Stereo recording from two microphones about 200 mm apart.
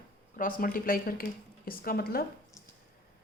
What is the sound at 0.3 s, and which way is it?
A woman's voice, 45° left (ahead or behind).